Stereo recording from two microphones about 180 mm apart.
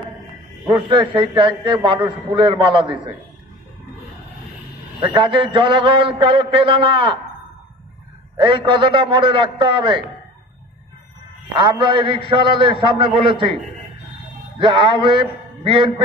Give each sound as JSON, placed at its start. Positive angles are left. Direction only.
{"t": 0.7, "sound": "a man's voice", "side_deg": -25}
{"t": 5.0, "sound": "a man's voice", "side_deg": -25}
{"t": 8.4, "sound": "a man's voice", "side_deg": -25}
{"t": 11.5, "sound": "a man's voice", "side_deg": -25}
{"t": 14.6, "sound": "a man's voice", "side_deg": -30}